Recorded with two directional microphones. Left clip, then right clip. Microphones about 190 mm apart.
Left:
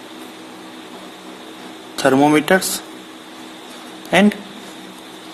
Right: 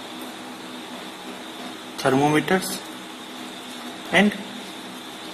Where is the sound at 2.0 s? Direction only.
50° left (ahead or behind).